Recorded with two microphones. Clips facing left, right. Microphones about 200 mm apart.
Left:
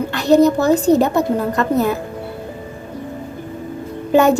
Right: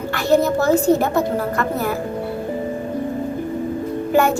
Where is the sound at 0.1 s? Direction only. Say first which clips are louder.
Left 4 dB; 15° left (ahead or behind).